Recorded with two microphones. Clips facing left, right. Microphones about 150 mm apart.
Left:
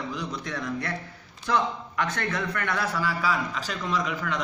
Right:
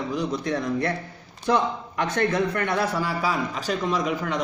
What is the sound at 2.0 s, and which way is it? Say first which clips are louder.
A man's voice: right 6 dB; 25° right (ahead or behind).